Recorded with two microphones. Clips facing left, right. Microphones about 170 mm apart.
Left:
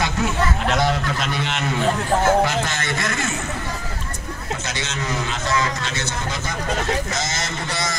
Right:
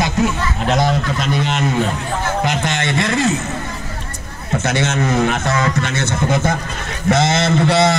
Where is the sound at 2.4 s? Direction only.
20° right (ahead or behind).